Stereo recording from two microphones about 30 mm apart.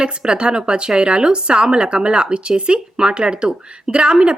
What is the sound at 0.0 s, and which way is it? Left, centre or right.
A woman's voice, right.